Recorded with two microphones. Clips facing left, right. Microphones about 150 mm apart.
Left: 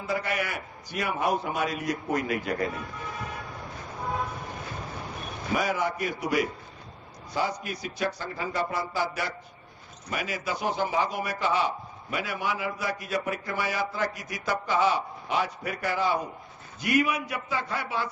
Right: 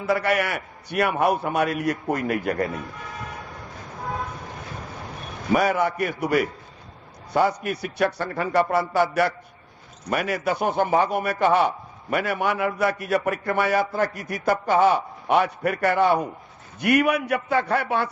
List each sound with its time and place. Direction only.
0.0 s a man's voice: 70° right (ahead or behind)
5.5 s a man's voice: 60° right (ahead or behind)